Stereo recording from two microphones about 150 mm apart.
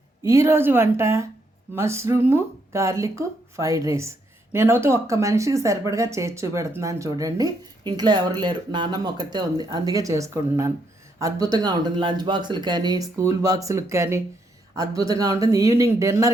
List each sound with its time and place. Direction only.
0.2 s a woman's voice: 20° right (ahead or behind)